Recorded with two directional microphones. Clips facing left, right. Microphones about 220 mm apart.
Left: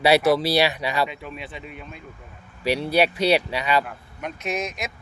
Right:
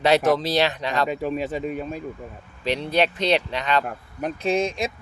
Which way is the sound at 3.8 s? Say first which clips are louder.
Right 5 dB; 40° right (ahead or behind).